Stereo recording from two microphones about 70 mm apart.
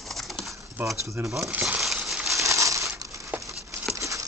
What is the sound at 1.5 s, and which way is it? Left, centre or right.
Speech, right.